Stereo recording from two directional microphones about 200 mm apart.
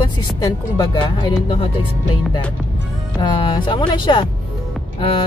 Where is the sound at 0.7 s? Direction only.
25° left (ahead or behind).